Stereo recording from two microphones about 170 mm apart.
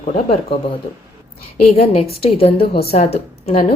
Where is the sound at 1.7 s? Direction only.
35° left (ahead or behind).